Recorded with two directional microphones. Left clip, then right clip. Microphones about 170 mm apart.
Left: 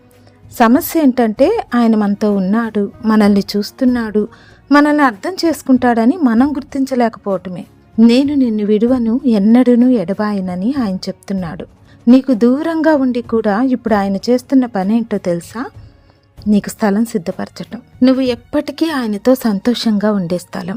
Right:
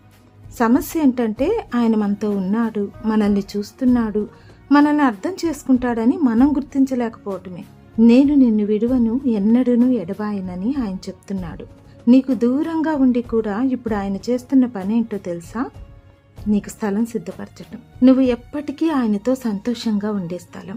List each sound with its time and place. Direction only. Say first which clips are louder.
0.5 s a woman's voice: left 7 dB; 40° left (ahead or behind)